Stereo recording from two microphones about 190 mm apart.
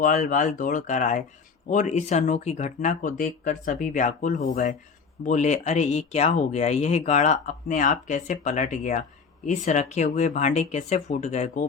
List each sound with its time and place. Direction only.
0.0 s speech: 50° left (ahead or behind)